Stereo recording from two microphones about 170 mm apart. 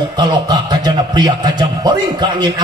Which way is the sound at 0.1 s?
25° right (ahead or behind).